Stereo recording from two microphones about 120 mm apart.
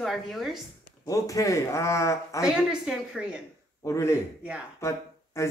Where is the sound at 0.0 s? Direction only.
Centre (ahead or behind).